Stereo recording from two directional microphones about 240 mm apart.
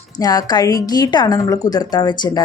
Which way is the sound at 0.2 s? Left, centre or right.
Centre.